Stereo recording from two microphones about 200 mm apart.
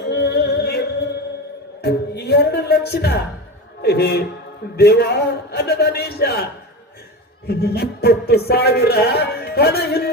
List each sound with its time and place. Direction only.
0.1 s music: 55° left (ahead or behind)
1.8 s speech: 55° left (ahead or behind)
3.8 s music: 55° left (ahead or behind)